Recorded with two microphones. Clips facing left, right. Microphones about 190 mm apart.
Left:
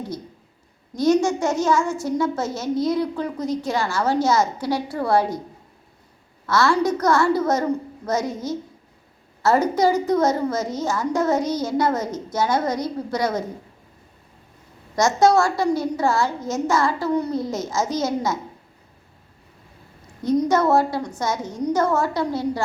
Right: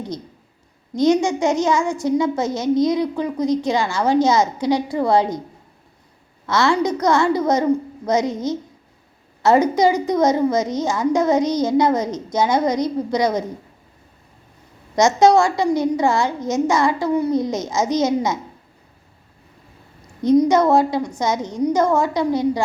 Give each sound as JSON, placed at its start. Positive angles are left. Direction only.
{"t": 0.9, "sound": "a woman's voice", "side_deg": -15}
{"t": 6.4, "sound": "a woman's voice", "side_deg": -20}
{"t": 14.9, "sound": "a woman's voice", "side_deg": -20}
{"t": 20.2, "sound": "a woman's voice", "side_deg": -15}